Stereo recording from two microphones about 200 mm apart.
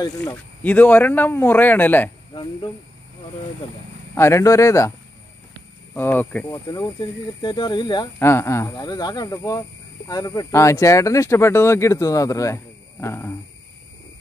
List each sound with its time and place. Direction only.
0.0 s speech: 20° left (ahead or behind)
0.6 s speech: 10° left (ahead or behind)
4.1 s speech: 15° left (ahead or behind)
5.9 s speech: 10° left (ahead or behind)